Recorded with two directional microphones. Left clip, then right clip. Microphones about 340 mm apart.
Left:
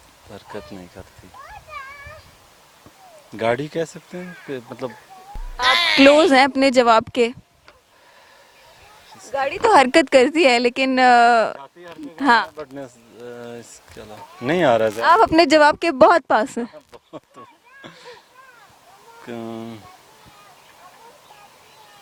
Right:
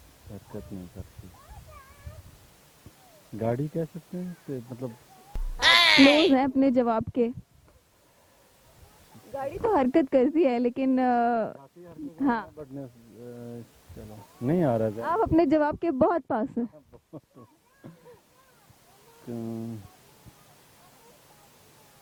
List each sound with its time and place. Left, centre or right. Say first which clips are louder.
3.3 s speech: left 9 dB; centre
5.5 s speech: left 3 dB; centre
9.4 s a woman's voice: left 11 dB; centre
14.4 s a woman's voice: left 9 dB; centre
19.4 s speech: left 5 dB; centre